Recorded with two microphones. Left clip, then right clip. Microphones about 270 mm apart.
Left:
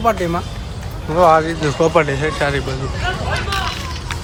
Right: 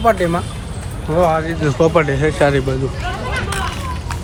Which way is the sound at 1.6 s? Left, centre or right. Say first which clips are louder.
Even; centre.